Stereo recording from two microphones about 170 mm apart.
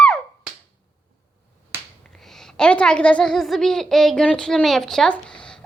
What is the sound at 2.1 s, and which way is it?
A child's voice, centre (ahead or behind).